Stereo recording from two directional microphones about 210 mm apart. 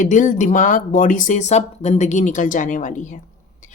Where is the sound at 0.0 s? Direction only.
35° left (ahead or behind).